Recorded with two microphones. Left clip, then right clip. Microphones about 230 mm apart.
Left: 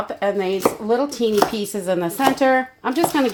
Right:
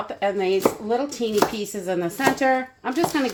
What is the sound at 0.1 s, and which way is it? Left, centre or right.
A woman's voice, left.